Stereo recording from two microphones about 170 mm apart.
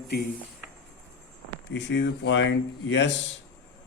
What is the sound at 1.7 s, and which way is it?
Speech, 90° left.